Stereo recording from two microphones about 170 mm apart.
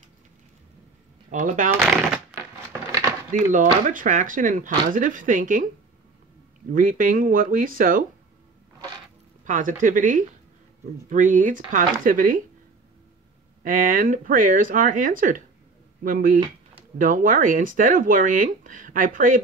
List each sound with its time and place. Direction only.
1.4 s speech: 50° right (ahead or behind)
3.5 s speech: 50° right (ahead or behind)
6.7 s speech: 50° right (ahead or behind)
9.4 s speech: 50° right (ahead or behind)
13.6 s speech: 55° right (ahead or behind)